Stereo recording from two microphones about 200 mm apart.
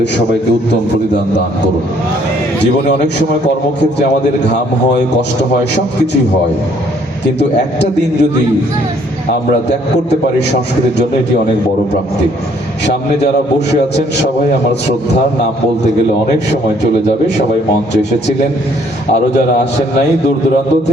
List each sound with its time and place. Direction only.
7.3 s a man's voice: 60° left (ahead or behind)